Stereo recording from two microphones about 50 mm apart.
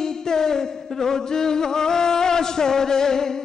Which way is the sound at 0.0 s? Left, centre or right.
Centre.